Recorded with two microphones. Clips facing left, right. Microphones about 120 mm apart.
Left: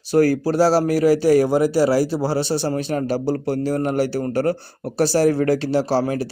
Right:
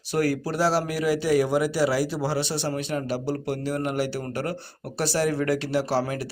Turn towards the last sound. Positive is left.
turn(degrees=30)  # may be behind; listen again after turning